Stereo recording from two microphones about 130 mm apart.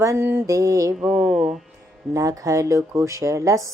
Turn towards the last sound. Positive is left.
turn(degrees=-25)  # may be behind; listen again after turning